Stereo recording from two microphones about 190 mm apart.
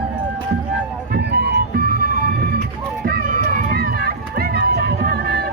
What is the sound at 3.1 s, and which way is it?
Run, 50° right (ahead or behind).